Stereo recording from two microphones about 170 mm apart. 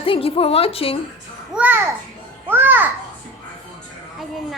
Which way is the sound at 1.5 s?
10° right (ahead or behind).